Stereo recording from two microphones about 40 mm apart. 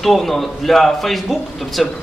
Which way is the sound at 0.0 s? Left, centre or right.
Centre.